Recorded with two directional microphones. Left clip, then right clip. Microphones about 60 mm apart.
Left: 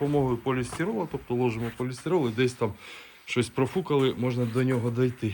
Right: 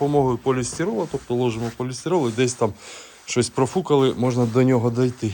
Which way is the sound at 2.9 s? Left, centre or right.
Right.